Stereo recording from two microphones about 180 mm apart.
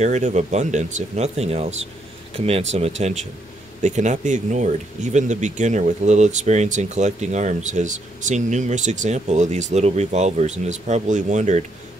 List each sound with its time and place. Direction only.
0.0 s speech: 40° right (ahead or behind)
3.8 s speech: 40° right (ahead or behind)